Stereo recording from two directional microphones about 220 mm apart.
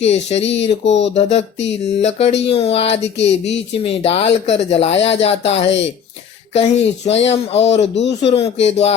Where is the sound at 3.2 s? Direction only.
55° left (ahead or behind).